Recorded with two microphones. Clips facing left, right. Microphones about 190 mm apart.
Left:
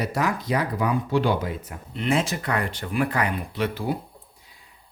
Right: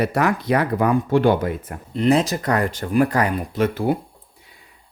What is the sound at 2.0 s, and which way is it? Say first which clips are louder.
Speech: right 7 dB; 35° right (ahead or behind).